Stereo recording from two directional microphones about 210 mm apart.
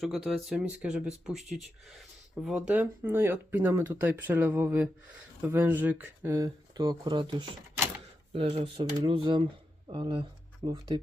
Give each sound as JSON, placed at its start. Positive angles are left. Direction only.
{"t": 0.0, "sound": "speech", "side_deg": 0}